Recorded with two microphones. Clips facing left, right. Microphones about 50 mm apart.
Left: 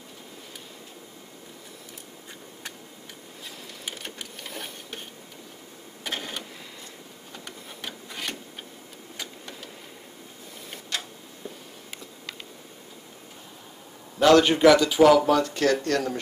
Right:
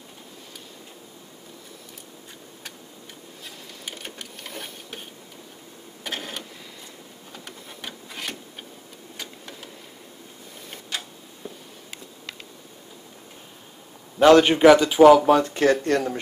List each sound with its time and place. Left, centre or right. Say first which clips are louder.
3.4 s printer: left 1 dB; centre
6.0 s printer: even; centre
9.1 s vehicle: even; centre
10.9 s tick-tock: even; centre
14.2 s speech: right 3 dB; right